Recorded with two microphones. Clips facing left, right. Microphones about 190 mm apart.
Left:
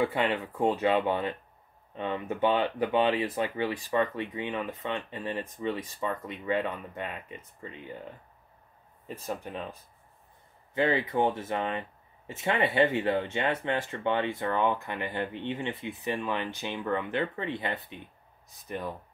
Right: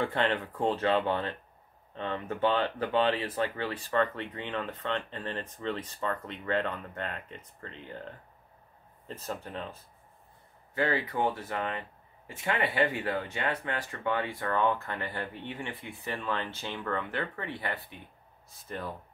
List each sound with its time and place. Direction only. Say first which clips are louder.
0.0 s speech: left 2 dB; 10° left (ahead or behind)